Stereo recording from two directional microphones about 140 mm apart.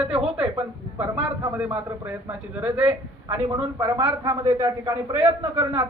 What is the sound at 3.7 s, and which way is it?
A man's voice, 25° right (ahead or behind).